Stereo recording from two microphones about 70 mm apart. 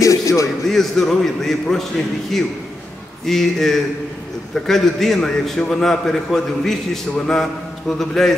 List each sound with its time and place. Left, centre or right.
0.0 s a sound: left
0.7 s a man's voice: centre
3.3 s a man's voice: centre